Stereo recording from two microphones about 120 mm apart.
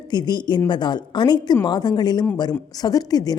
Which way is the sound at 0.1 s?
35° left (ahead or behind).